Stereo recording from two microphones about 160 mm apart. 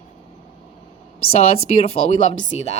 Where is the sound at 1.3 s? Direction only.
40° left (ahead or behind).